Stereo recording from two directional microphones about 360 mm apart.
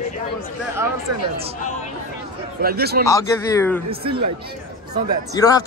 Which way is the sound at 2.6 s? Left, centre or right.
Right.